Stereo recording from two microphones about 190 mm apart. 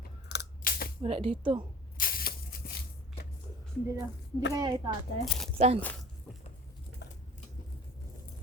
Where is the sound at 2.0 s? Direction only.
50° left (ahead or behind).